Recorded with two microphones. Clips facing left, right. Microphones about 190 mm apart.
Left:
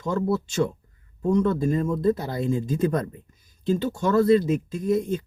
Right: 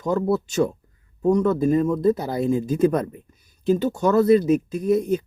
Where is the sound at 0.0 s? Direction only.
40° right (ahead or behind).